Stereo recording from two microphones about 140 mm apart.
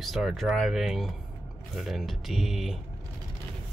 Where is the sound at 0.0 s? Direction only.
Centre (ahead or behind).